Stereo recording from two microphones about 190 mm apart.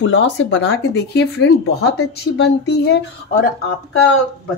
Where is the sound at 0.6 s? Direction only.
60° left (ahead or behind).